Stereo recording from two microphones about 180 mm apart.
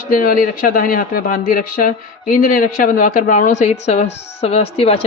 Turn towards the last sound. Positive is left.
turn(degrees=35)  # may be behind; listen again after turning